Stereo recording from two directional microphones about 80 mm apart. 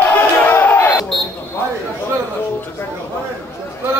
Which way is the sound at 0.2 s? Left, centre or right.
Left.